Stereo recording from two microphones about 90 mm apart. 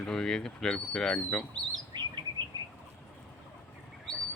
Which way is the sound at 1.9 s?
55° right (ahead or behind).